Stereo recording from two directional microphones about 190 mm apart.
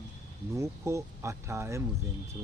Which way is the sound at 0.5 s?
15° right (ahead or behind).